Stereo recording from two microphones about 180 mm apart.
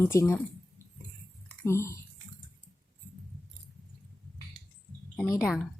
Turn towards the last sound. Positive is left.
turn(degrees=15)  # may be behind; listen again after turning